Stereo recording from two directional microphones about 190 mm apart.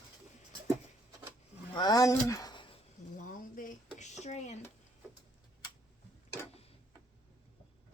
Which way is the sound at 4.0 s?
35° left (ahead or behind).